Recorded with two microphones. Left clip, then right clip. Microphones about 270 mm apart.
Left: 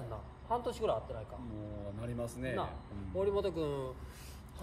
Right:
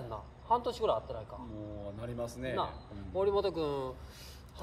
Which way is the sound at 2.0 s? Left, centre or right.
Centre.